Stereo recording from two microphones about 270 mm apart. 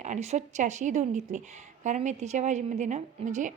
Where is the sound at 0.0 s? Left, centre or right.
Right.